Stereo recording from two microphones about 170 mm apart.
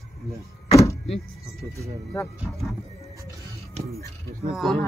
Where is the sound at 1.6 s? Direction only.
15° right (ahead or behind).